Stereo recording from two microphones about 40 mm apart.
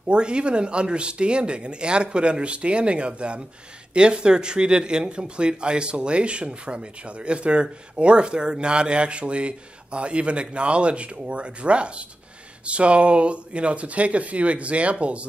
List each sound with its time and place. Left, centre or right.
0.1 s speech: right